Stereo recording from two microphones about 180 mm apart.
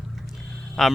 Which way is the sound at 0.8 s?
Centre (ahead or behind).